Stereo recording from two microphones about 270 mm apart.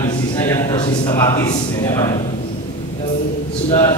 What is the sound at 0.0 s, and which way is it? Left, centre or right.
A man's voice, centre.